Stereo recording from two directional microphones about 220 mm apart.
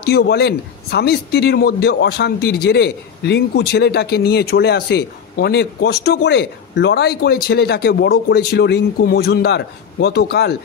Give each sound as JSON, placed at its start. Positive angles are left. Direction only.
{"t": 0.0, "sound": "speech", "side_deg": 45}